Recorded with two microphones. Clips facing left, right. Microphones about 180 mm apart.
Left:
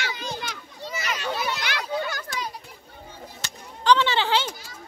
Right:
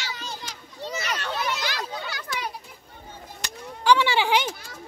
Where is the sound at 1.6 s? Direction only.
60° left (ahead or behind).